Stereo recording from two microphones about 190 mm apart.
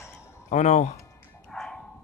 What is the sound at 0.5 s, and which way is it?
Speech, 40° left (ahead or behind).